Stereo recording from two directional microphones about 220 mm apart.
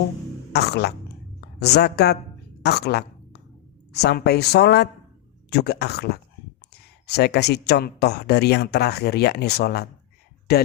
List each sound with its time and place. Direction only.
0.5 s a woman's voice: 50° left (ahead or behind)